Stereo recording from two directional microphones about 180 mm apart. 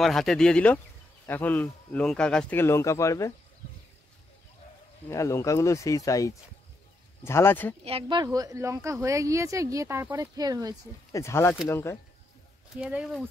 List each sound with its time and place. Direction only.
0.0 s speech: centre (ahead or behind); by 3.3 s 15° left (ahead or behind)
5.0 s speech: 15° left (ahead or behind)
7.8 s a woman's voice: 30° right (ahead or behind)
11.1 s speech: 15° left (ahead or behind)
12.8 s speech: 5° right (ahead or behind)